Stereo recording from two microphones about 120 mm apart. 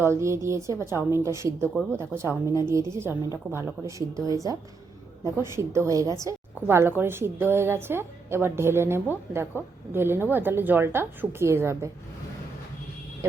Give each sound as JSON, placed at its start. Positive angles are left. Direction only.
{"t": 0.0, "sound": "a woman's voice", "side_deg": -25}